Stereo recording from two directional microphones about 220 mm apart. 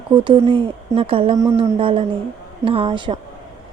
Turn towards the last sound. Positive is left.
turn(degrees=-25)  # may be behind; listen again after turning